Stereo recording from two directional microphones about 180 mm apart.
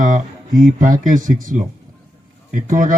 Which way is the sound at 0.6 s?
45° right (ahead or behind).